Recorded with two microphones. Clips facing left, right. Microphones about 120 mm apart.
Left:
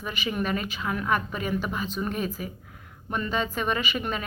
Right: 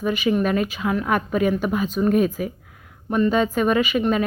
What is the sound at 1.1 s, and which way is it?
A woman's voice, 50° right (ahead or behind).